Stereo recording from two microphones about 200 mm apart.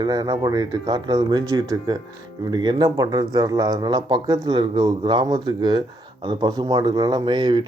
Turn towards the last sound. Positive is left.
turn(degrees=-20)  # may be behind; listen again after turning